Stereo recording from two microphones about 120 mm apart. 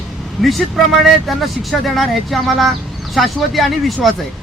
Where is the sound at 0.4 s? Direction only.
Centre (ahead or behind).